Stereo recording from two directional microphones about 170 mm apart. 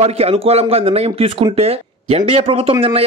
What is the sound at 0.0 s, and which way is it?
Speech, 35° right (ahead or behind).